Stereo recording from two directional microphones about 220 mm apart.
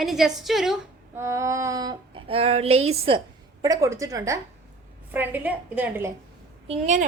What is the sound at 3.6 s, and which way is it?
A woman's voice, 15° right (ahead or behind).